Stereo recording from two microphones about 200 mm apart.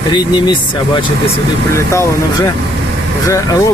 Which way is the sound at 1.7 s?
15° left (ahead or behind).